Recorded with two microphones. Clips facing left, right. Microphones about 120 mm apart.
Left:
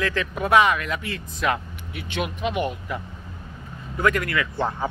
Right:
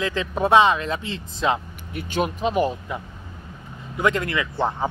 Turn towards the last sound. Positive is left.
turn(degrees=-20)  # may be behind; listen again after turning